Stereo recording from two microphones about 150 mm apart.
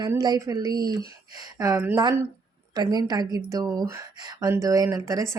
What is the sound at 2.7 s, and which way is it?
Speech, 25° right (ahead or behind).